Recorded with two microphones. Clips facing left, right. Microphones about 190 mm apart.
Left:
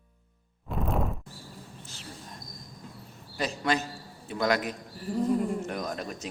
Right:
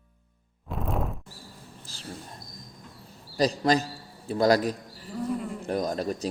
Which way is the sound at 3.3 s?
35° right (ahead or behind).